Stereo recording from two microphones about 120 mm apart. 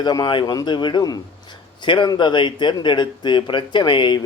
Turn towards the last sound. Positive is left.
turn(degrees=40)  # may be behind; listen again after turning